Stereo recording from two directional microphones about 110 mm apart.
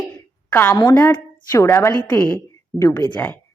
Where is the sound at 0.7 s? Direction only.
35° left (ahead or behind).